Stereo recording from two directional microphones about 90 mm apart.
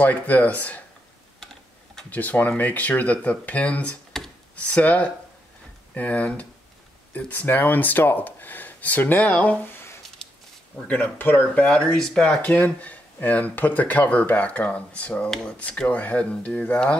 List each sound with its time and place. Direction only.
0.0 s speech: 20° left (ahead or behind)
1.4 s typing: 5° left (ahead or behind)
2.0 s speech: 20° left (ahead or behind)
4.1 s computer keyboard: 5° left (ahead or behind)
4.6 s speech: 15° left (ahead or behind)
10.2 s a sound: 5° left (ahead or behind)
10.9 s speech: 20° left (ahead or behind)
11.6 s speech: 10° left (ahead or behind)
12.4 s speech: 20° left (ahead or behind)